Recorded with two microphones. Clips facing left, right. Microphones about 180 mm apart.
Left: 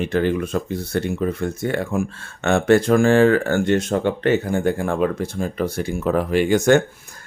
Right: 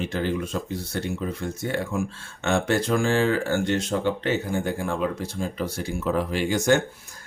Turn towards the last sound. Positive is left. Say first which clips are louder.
# left 6 dB
turn(degrees=55)  # may be behind; listen again after turning